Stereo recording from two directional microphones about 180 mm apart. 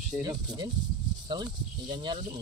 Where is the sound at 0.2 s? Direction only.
20° right (ahead or behind).